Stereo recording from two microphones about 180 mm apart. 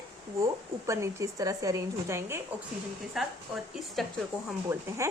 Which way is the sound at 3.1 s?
Centre (ahead or behind).